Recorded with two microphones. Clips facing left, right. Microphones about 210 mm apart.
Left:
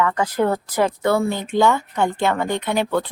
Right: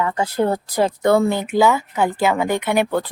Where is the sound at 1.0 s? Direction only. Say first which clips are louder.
Right 3 dB; 15° right (ahead or behind).